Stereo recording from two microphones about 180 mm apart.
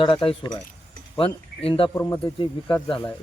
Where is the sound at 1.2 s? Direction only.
30° left (ahead or behind).